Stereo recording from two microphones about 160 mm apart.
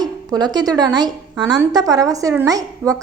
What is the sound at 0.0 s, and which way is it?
A woman's voice, 25° right (ahead or behind).